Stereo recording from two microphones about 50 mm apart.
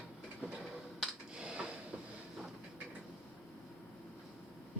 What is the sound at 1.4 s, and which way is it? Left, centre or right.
Drawer open or close, centre.